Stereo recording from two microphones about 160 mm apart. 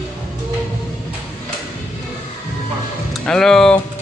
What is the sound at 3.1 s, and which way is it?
Music, 5° left (ahead or behind).